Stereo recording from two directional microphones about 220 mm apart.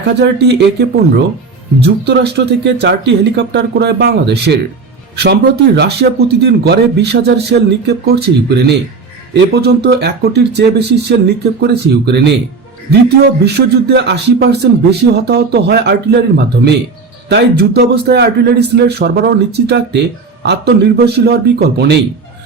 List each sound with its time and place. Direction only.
0.1 s speech: 50° right (ahead or behind)
17.2 s speech: 50° right (ahead or behind)